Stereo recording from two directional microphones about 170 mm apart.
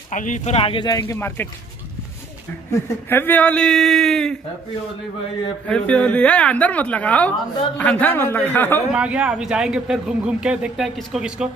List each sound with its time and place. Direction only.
0.1 s speech: 45° left (ahead or behind); by 1.5 s 15° left (ahead or behind)
3.1 s speech: 10° left (ahead or behind)
5.7 s a woman's voice: 5° left (ahead or behind)
8.9 s speech: 10° right (ahead or behind)